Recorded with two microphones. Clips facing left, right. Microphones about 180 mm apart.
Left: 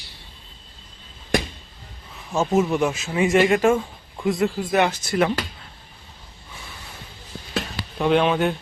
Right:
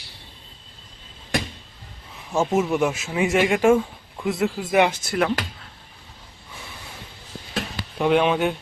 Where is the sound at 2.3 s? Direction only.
5° right (ahead or behind).